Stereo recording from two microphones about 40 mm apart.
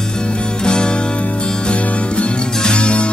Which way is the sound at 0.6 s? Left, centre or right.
Left.